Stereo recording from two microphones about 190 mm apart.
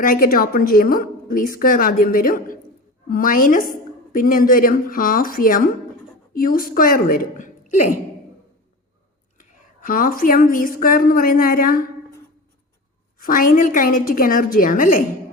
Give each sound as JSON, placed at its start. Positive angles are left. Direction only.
{"t": 0.0, "sound": "a woman's voice", "side_deg": 50}
{"t": 9.4, "sound": "a woman's voice", "side_deg": 45}
{"t": 13.1, "sound": "a woman's voice", "side_deg": 45}